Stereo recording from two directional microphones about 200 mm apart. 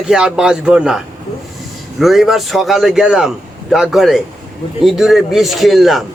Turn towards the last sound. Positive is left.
turn(degrees=0)  # may be behind; listen again after turning